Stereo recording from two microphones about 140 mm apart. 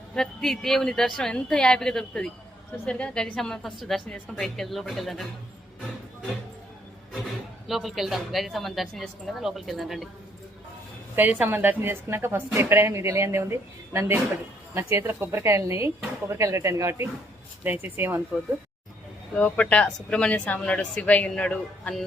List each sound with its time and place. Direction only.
0.1 s a woman's voice: 5° left (ahead or behind)
7.7 s a woman's voice: centre (ahead or behind)
11.1 s a woman's voice: 15° right (ahead or behind)
19.4 s a woman's voice: 10° left (ahead or behind)